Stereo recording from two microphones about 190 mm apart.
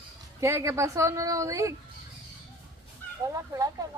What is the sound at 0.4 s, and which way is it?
A woman's voice, 15° right (ahead or behind).